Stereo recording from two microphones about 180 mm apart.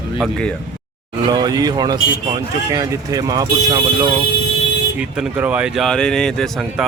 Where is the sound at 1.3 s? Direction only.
20° right (ahead or behind).